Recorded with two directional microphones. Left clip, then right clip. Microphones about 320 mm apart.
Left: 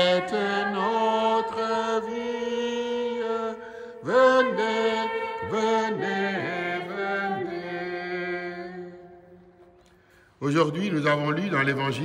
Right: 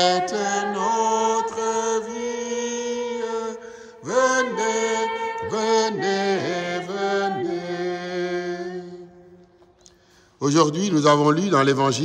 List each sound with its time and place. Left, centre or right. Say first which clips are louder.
0.1 s music: right 2 dB; right
0.4 s music: right 2 dB; centre
0.7 s mantra: right 3 dB; centre
7.2 s music: right 4 dB; right
7.8 s chant: right 4 dB; centre
10.4 s a man's voice: right 5 dB; centre